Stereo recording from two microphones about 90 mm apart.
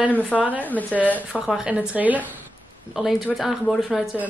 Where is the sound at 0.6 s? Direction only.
20° left (ahead or behind).